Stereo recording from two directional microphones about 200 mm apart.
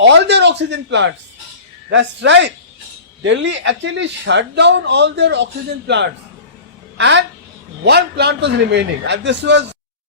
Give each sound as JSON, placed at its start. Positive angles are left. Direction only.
{"t": 0.0, "sound": "speech", "side_deg": -60}
{"t": 6.9, "sound": "a woman's voice", "side_deg": -65}